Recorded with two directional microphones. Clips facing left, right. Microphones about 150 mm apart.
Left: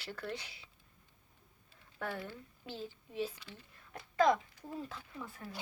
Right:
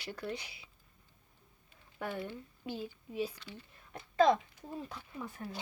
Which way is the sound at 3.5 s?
25° right (ahead or behind).